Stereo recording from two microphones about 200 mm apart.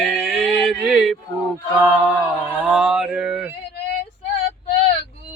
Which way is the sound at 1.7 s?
5° right (ahead or behind).